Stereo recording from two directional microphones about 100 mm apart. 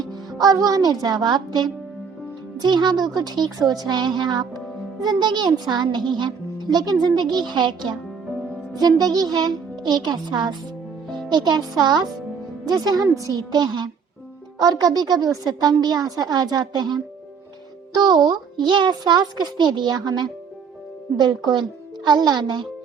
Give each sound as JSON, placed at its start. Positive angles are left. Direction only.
{"t": 0.3, "sound": "a child's voice", "side_deg": -40}